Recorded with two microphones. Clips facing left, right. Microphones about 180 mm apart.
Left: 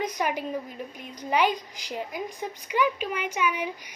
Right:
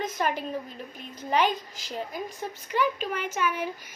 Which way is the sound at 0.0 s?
15° left (ahead or behind).